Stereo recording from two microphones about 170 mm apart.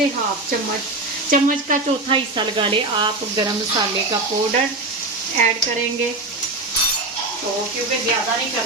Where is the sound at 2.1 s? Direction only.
30° right (ahead or behind).